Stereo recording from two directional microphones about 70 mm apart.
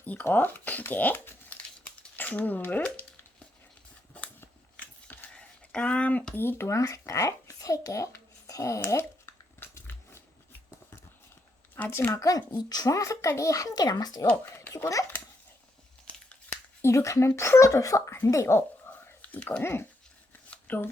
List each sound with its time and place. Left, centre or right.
0.0 s speech: left
4.8 s a sound: centre
6.3 s speech: left
8.8 s a sound: left
9.8 s biting: left
11.9 s speech: left
12.2 s a child's voice: left
14.8 s speech: left
16.8 s speech: left
18.9 s whispering: left
19.6 s speech: left
20.5 s shuffling cards: left